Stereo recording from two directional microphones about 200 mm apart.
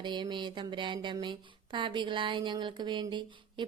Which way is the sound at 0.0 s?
25° right (ahead or behind).